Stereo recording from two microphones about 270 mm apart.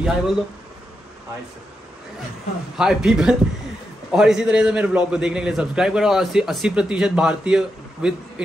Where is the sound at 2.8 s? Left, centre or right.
Centre.